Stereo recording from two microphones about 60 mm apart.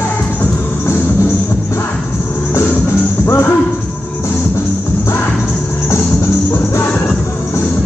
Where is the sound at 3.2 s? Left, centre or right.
Left.